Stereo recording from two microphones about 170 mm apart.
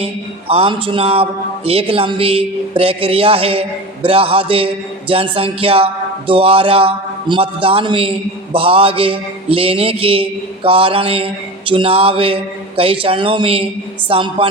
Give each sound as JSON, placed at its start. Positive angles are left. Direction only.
{"t": 0.0, "sound": "a man's voice", "side_deg": -35}